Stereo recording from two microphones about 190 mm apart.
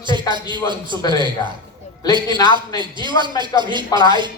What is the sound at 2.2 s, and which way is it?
Speech, 20° left (ahead or behind).